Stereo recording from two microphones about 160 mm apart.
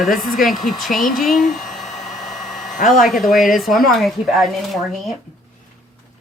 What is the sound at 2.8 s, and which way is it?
Speech, 55° left (ahead or behind).